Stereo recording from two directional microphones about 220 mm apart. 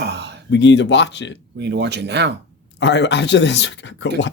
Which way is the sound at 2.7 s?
50° left (ahead or behind).